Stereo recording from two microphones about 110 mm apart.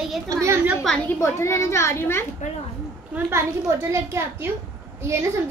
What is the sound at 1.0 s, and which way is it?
A child's voice, 25° left (ahead or behind).